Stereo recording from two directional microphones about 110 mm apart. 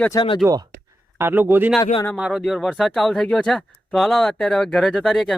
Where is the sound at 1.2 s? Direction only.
20° right (ahead or behind).